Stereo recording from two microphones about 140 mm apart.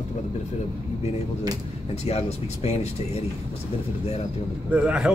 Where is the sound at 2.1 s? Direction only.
50° left (ahead or behind).